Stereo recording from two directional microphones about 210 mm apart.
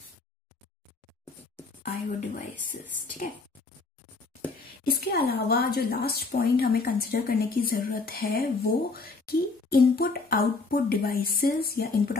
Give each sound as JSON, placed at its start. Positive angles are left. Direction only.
{"t": 1.8, "sound": "speech", "side_deg": 40}
{"t": 4.8, "sound": "a woman's voice", "side_deg": 45}